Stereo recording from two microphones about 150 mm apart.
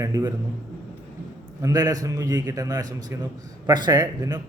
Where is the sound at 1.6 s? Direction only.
25° right (ahead or behind).